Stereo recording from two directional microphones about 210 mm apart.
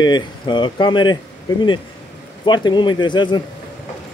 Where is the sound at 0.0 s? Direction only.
20° left (ahead or behind).